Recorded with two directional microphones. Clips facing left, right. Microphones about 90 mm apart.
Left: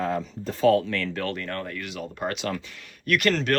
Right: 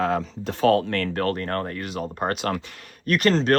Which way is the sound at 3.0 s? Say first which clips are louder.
Right 3 dB; 35° right (ahead or behind).